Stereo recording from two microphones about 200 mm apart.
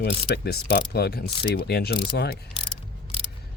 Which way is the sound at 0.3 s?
50° left (ahead or behind).